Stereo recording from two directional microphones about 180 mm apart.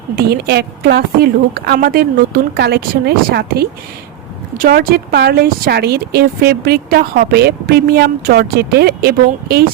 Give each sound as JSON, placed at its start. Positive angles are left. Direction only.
{"t": 0.2, "sound": "a woman's voice", "side_deg": -60}